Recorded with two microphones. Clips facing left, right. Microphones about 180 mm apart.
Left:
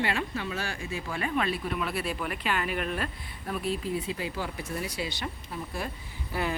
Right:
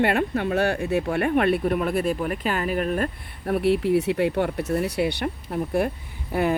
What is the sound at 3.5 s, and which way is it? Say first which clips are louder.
Speech: right 11 dB; 70° right (ahead or behind).